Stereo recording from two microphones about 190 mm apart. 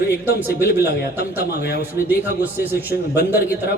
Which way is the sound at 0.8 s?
55° left (ahead or behind).